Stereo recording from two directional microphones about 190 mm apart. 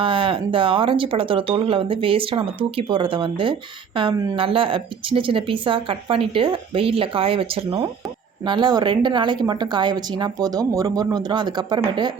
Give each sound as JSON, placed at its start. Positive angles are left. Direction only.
{"t": 0.0, "sound": "speech", "side_deg": -30}